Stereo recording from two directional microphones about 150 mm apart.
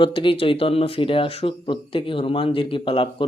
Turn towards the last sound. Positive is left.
turn(degrees=35)  # may be behind; listen again after turning